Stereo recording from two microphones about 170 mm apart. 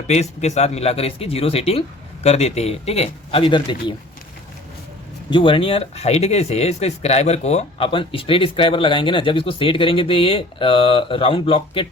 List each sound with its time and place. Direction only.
0.1 s speech: 40° left (ahead or behind)
5.3 s speech: 30° left (ahead or behind)